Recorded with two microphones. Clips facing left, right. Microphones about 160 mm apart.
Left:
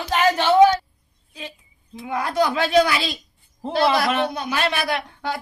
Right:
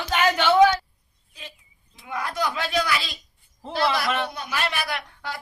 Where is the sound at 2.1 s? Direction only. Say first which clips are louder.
Left 6 dB; 30° left (ahead or behind).